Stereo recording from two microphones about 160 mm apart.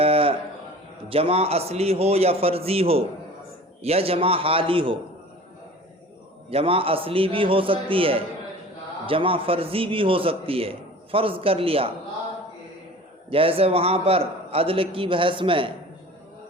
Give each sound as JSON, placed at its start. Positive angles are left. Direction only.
{"t": 0.0, "sound": "a sound", "side_deg": -35}
{"t": 1.1, "sound": "a man's voice", "side_deg": -40}
{"t": 6.5, "sound": "a man's voice", "side_deg": -35}
{"t": 13.3, "sound": "a man's voice", "side_deg": -35}